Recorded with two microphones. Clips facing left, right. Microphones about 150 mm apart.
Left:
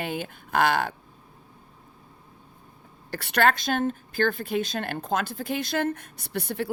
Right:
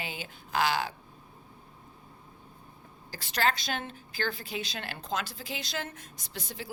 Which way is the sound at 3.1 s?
60° left (ahead or behind).